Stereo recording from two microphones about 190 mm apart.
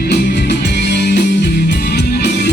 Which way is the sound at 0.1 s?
65° left (ahead or behind).